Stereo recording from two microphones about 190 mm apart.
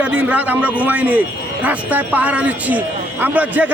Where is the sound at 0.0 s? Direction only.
5° right (ahead or behind).